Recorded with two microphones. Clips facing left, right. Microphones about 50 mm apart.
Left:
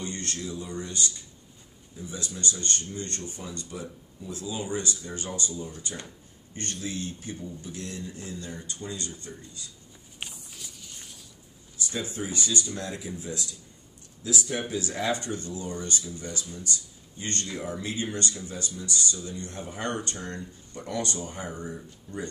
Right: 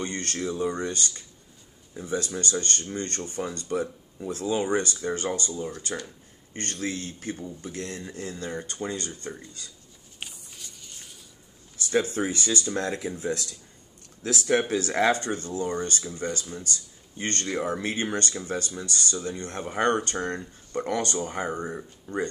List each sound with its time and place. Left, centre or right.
0.0 s speech: right
10.2 s a sound: centre
11.9 s speech: right
14.2 s speech: right